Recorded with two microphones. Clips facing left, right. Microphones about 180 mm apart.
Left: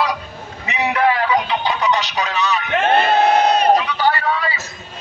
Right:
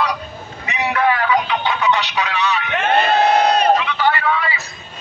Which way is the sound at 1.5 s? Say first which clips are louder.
Even; 35° left (ahead or behind).